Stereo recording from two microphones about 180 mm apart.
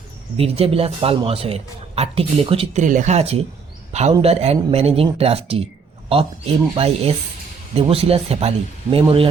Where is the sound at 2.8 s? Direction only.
45° right (ahead or behind).